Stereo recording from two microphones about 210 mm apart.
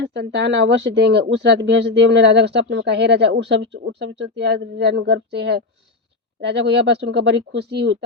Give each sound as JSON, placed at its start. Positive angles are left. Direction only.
{"t": 0.0, "sound": "speech", "side_deg": -55}